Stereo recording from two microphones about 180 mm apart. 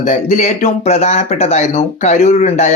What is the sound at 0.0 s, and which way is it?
Speech, 40° left (ahead or behind).